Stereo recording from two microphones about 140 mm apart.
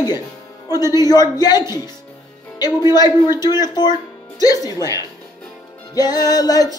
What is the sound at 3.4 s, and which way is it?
Music, 30° left (ahead or behind).